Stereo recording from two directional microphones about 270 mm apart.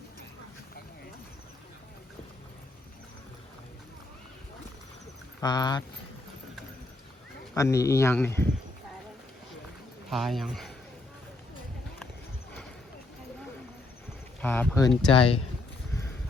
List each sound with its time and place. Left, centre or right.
5.4 s speech: centre
7.5 s speech: centre
10.1 s a man's voice: centre
14.4 s speech: centre
15.1 s speech: centre